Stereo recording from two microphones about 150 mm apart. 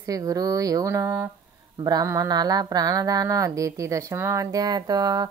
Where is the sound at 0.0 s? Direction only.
25° right (ahead or behind).